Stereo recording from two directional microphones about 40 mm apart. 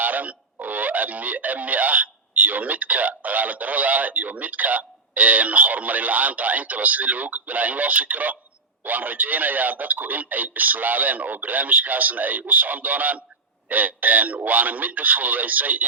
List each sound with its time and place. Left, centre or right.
0.0 s music: right
8.8 s a man's voice: right